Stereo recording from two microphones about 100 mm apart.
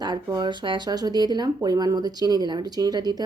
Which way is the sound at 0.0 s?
45° right (ahead or behind).